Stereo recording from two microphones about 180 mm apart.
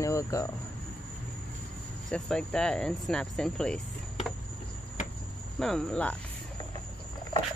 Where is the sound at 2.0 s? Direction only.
5° left (ahead or behind).